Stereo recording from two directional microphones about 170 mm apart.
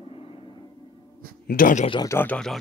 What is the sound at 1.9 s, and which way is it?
Speech, 25° left (ahead or behind).